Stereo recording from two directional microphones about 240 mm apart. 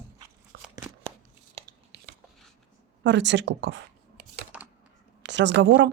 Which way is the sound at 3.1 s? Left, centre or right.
Right.